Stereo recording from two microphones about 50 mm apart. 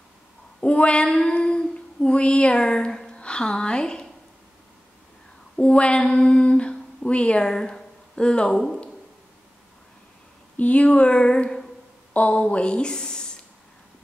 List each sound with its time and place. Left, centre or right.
0.6 s female singing: left
3.1 s a woman's voice: left
5.6 s a sound: left
7.1 s speech: left
10.6 s a sound: left
12.1 s a woman's voice: left